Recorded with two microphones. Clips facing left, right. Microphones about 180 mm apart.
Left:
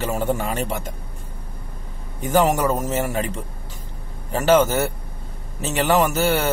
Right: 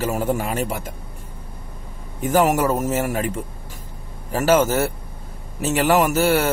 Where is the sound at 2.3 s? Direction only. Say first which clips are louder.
Right 1 dB; 5° right (ahead or behind).